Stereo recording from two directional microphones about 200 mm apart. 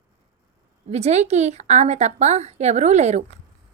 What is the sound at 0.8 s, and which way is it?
A woman's voice, 35° right (ahead or behind).